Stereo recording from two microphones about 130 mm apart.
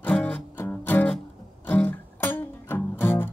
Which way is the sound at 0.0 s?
10° left (ahead or behind).